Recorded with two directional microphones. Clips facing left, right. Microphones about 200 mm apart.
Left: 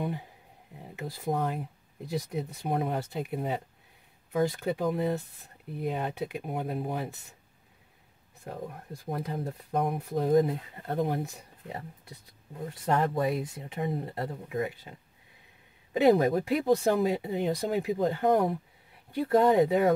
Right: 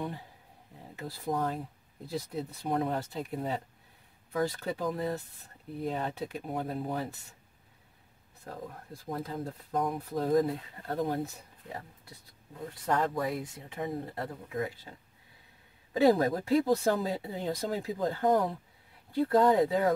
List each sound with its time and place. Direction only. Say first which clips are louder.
0.9 s speech: left 2 dB; 20° left (ahead or behind)
9.1 s speech: left 2 dB; 20° left (ahead or behind)
12.8 s speech: left 3 dB; 25° left (ahead or behind)